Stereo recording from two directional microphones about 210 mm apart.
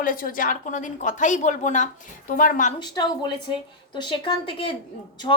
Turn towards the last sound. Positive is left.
turn(degrees=25)  # may be behind; listen again after turning